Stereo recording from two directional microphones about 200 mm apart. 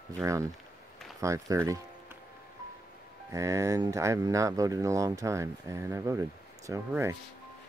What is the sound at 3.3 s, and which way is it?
Speech, 15° right (ahead or behind).